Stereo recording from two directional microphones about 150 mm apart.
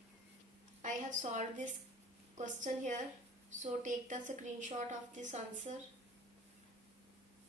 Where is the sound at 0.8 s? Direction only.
55° right (ahead or behind).